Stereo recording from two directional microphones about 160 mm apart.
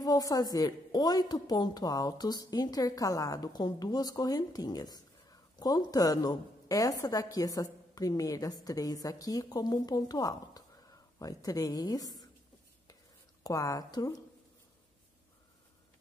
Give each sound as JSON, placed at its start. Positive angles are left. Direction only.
{"t": 0.0, "sound": "a woman's voice", "side_deg": 25}
{"t": 13.4, "sound": "a woman's voice", "side_deg": 20}